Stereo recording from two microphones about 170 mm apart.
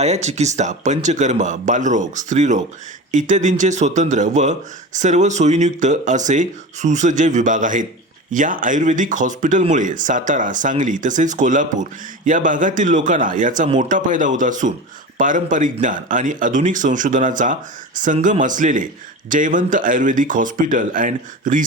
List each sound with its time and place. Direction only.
0.0 s speech: 40° right (ahead or behind)